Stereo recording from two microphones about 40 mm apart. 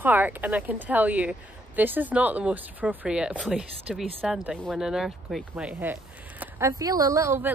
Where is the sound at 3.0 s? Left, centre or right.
Right.